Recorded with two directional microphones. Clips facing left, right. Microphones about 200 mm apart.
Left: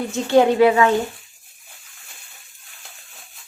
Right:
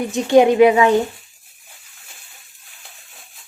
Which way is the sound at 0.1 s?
15° right (ahead or behind).